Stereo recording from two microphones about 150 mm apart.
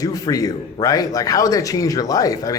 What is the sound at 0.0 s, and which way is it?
A man's voice, 25° left (ahead or behind).